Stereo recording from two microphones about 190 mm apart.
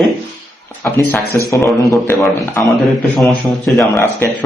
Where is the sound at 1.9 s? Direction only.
15° left (ahead or behind).